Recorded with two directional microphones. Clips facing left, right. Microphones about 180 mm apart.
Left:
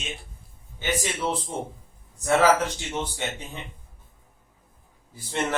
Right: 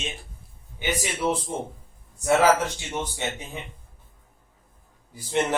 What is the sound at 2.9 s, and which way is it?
Speech, 15° right (ahead or behind).